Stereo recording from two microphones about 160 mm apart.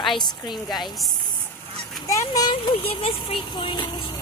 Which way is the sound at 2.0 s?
20° left (ahead or behind).